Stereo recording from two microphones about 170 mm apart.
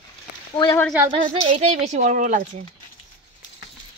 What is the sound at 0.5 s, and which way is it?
Speech, 25° left (ahead or behind).